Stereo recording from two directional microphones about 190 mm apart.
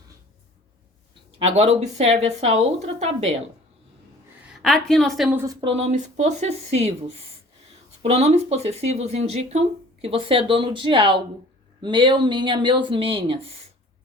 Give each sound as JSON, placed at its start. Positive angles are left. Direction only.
{"t": 1.4, "sound": "speech", "side_deg": -35}
{"t": 4.5, "sound": "a woman's voice", "side_deg": 0}
{"t": 5.5, "sound": "speech", "side_deg": -25}